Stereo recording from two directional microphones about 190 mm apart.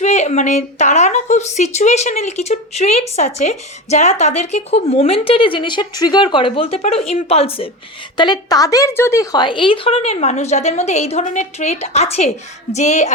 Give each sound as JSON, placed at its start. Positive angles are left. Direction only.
{"t": 0.0, "sound": "a woman's voice", "side_deg": 35}